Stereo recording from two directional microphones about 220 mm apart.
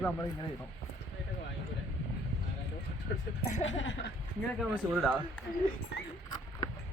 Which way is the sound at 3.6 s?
55° left (ahead or behind).